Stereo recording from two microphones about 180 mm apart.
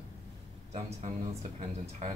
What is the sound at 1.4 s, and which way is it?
Speech, 35° right (ahead or behind).